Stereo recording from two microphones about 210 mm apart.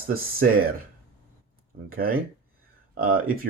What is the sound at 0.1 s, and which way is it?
Speech, 45° right (ahead or behind).